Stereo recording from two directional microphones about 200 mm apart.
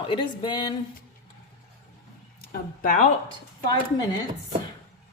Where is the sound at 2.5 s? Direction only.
40° left (ahead or behind).